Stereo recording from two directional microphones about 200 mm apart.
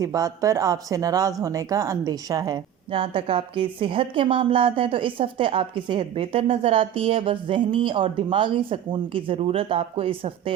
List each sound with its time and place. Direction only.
0.0 s speech: 15° right (ahead or behind)